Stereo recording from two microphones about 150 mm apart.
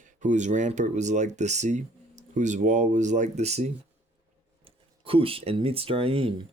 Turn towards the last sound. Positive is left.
turn(degrees=-35)  # may be behind; listen again after turning